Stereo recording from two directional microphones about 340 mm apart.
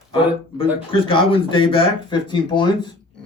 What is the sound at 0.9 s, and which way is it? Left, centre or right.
Speech, centre.